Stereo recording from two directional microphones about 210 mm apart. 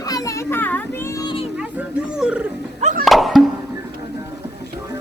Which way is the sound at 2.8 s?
35° right (ahead or behind).